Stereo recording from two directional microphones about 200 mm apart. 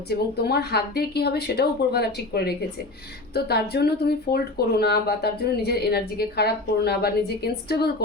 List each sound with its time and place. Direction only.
0.1 s speech: 55° left (ahead or behind)